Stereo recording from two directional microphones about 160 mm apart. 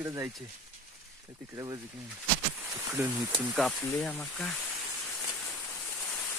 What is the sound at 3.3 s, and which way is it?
Speech, centre (ahead or behind).